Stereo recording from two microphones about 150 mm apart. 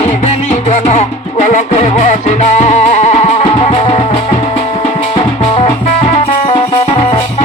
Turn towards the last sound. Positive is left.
turn(degrees=35)  # may be behind; listen again after turning